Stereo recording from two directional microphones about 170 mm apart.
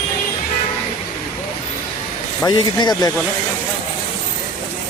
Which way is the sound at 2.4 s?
25° left (ahead or behind).